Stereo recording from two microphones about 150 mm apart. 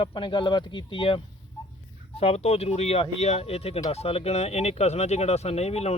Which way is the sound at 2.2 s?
45° left (ahead or behind).